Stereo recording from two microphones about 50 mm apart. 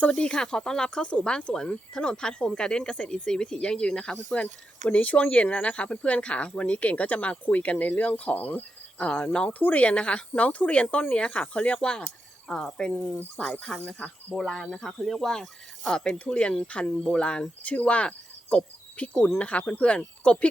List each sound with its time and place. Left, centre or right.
0.1 s speech: centre
9.6 s speech: left; by 16.0 s centre
16.0 s speech: left
17.6 s cricket: left
19.4 s speech: left